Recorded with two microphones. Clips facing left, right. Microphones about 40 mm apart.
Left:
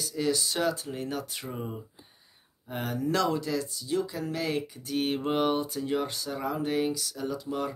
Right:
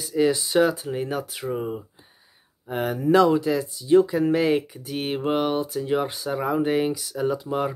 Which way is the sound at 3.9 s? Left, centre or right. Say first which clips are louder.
Right 14 dB; right.